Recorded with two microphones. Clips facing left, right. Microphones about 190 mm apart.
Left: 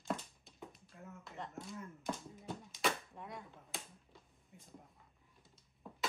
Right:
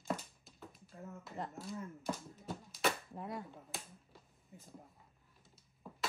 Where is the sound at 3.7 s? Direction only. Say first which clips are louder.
Right 1 dB; centre (ahead or behind).